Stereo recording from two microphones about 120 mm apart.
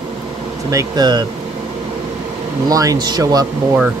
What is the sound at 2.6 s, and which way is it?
Speech, 30° right (ahead or behind).